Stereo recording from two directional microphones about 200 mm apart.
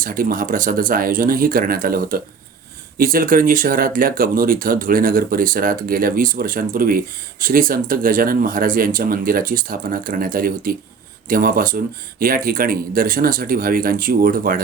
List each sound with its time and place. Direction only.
0.0 s speech: 45° right (ahead or behind)